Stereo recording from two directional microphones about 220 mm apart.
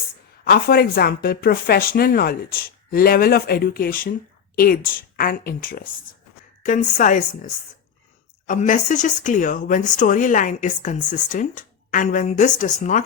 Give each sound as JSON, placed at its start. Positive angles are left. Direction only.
{"t": 0.4, "sound": "speech", "side_deg": 45}